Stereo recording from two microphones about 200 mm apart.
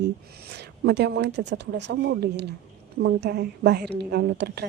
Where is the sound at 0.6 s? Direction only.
60° right (ahead or behind).